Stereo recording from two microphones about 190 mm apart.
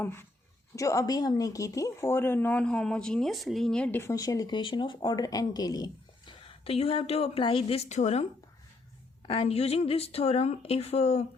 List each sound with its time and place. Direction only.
0.0 s a woman's voice: 10° left (ahead or behind); by 11.3 s 30° left (ahead or behind)